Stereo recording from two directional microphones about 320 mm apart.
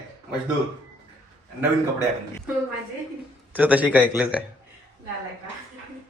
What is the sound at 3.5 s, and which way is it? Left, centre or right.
Speech, centre.